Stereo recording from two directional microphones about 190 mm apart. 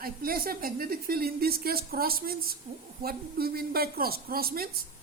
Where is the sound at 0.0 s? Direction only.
50° right (ahead or behind).